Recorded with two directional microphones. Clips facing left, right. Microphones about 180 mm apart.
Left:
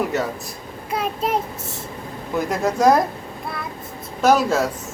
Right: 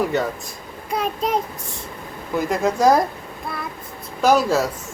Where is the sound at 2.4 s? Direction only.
Centre (ahead or behind).